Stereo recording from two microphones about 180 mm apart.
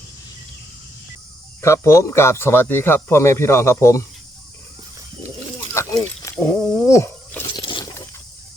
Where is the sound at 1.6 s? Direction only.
15° left (ahead or behind).